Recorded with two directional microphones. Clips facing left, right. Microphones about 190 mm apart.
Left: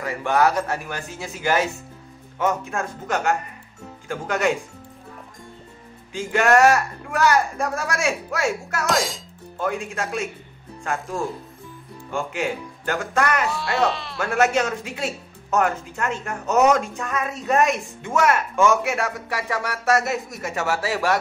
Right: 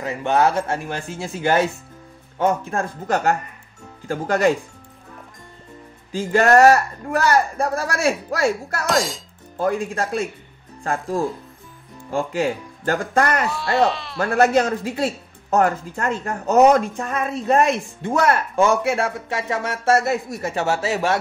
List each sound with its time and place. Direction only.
0.0 s speech: 20° right (ahead or behind)
6.1 s speech: 35° right (ahead or behind)
8.8 s speech: centre (ahead or behind)
9.6 s speech: 35° right (ahead or behind)
13.5 s speech: centre (ahead or behind)
14.2 s speech: 35° right (ahead or behind)